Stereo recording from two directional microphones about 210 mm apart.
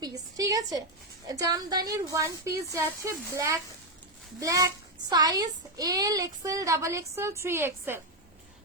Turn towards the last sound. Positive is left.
turn(degrees=-10)  # may be behind; listen again after turning